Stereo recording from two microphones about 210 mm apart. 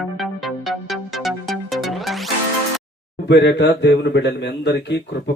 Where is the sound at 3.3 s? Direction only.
55° left (ahead or behind).